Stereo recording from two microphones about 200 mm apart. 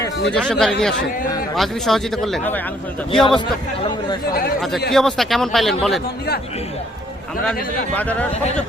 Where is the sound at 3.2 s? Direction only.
25° left (ahead or behind).